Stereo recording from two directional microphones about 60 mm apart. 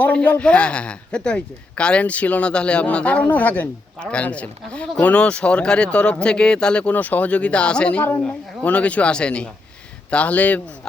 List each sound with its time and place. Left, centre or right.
0.1 s a man's voice: left
6.9 s a man's voice: left